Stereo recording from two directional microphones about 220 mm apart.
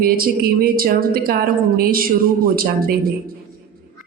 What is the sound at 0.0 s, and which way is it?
A man's voice, 40° right (ahead or behind).